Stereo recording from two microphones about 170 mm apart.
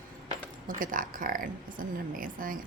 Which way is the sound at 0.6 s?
55° right (ahead or behind).